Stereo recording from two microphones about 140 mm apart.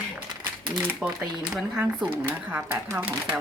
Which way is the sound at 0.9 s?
5° right (ahead or behind).